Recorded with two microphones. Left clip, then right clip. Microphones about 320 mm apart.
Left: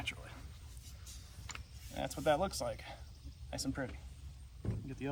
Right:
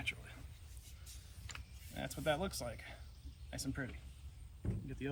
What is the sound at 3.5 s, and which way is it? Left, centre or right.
Speech, centre.